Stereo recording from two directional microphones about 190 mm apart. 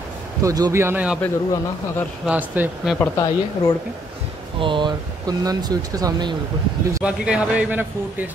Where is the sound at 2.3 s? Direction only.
5° right (ahead or behind).